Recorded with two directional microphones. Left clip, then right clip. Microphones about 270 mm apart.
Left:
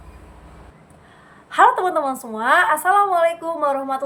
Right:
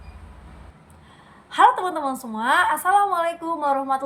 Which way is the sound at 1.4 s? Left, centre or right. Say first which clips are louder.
Left 2 dB; centre.